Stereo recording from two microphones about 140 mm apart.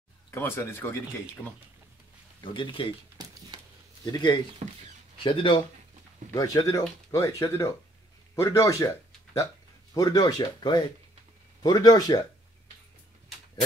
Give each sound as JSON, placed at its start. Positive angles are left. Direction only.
{"t": 0.3, "sound": "speech", "side_deg": 15}
{"t": 2.4, "sound": "speech", "side_deg": 35}
{"t": 3.5, "sound": "a sound", "side_deg": -30}
{"t": 4.0, "sound": "speech", "side_deg": 30}
{"t": 4.6, "sound": "speech", "side_deg": -55}
{"t": 5.2, "sound": "speech", "side_deg": 35}
{"t": 6.3, "sound": "speech", "side_deg": 25}